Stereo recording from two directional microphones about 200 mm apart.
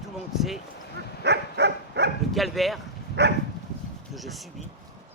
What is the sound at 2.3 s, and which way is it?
Speech, centre (ahead or behind).